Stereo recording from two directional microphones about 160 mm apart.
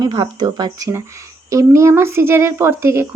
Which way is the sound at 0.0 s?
25° right (ahead or behind).